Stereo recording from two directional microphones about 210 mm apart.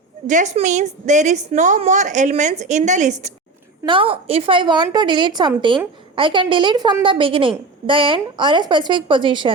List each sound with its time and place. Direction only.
0.3 s a woman's voice: 35° right (ahead or behind)
3.8 s a woman's voice: 25° right (ahead or behind)